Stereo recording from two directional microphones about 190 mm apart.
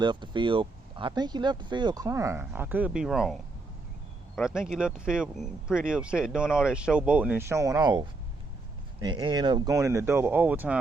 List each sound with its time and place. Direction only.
0.0 s speech: 25° right (ahead or behind); by 3.3 s centre (ahead or behind)
4.4 s speech: centre (ahead or behind)